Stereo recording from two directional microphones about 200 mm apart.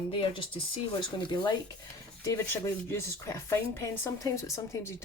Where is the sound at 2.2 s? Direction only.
15° left (ahead or behind).